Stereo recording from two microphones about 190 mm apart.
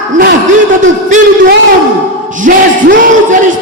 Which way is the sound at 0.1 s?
55° right (ahead or behind).